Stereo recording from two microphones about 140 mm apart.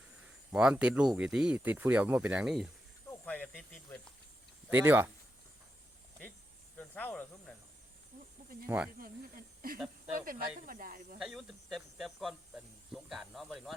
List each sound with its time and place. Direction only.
0.5 s speech: 5° right (ahead or behind)
3.1 s snake: 10° left (ahead or behind)
4.7 s speech: 15° right (ahead or behind)
6.7 s speech: 10° left (ahead or behind)
9.0 s speech: 90° right
11.2 s speech: centre (ahead or behind)